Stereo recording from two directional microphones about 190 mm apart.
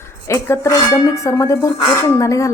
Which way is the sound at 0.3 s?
15° left (ahead or behind).